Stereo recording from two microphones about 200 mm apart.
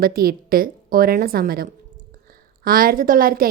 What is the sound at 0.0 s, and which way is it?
A woman's voice, 45° right (ahead or behind).